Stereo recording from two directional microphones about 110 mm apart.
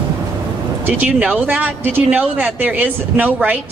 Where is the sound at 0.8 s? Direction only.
15° right (ahead or behind).